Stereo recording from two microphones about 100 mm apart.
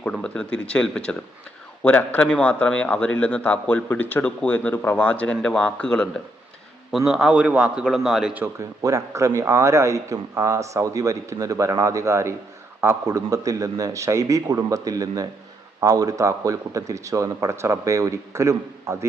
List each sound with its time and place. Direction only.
0.0 s a man's voice: 10° left (ahead or behind)
6.9 s a man's voice: 5° right (ahead or behind)
8.5 s a man's voice: 30° right (ahead or behind)